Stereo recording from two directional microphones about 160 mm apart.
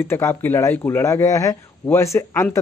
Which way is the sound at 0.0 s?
15° left (ahead or behind).